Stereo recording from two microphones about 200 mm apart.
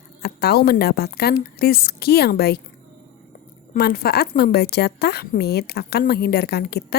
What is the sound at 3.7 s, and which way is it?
A woman's voice, 50° left (ahead or behind).